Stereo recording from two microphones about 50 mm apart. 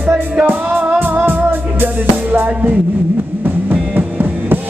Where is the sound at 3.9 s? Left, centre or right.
Right.